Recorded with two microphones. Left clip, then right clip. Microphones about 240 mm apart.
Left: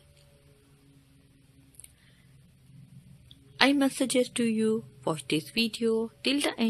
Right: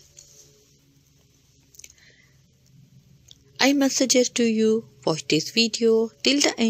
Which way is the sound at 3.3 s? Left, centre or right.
Centre.